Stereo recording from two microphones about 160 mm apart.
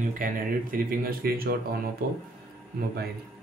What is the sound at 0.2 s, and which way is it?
Speech, 60° right (ahead or behind).